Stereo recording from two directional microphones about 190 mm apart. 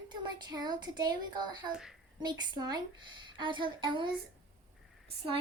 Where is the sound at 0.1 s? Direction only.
25° right (ahead or behind).